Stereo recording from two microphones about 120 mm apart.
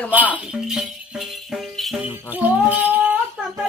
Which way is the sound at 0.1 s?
15° right (ahead or behind).